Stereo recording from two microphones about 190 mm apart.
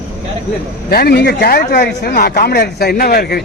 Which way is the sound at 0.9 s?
55° left (ahead or behind).